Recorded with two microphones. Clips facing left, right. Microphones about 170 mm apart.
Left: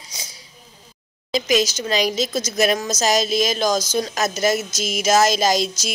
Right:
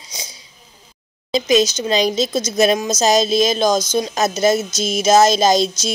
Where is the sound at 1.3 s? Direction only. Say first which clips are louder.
Right 4 dB; 25° right (ahead or behind).